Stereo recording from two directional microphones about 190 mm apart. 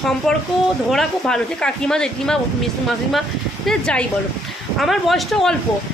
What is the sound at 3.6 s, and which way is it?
A woman's voice, 5° left (ahead or behind).